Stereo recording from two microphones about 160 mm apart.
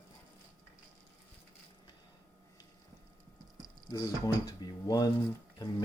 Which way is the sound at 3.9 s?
25° left (ahead or behind).